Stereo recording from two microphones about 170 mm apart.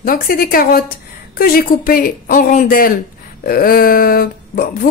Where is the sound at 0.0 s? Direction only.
60° left (ahead or behind).